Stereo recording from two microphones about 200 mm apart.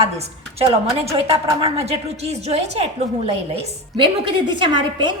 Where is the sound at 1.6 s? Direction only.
30° right (ahead or behind).